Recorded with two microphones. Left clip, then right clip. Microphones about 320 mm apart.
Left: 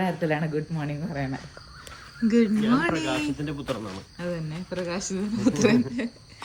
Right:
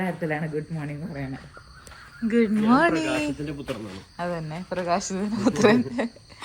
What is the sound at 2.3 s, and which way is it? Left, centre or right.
A woman's voice, centre.